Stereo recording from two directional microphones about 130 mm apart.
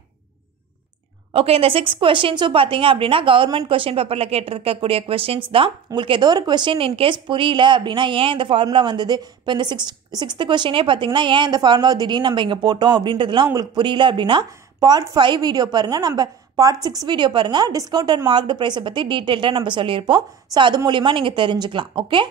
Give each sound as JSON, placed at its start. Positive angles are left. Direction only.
{"t": 1.3, "sound": "a woman's voice", "side_deg": -50}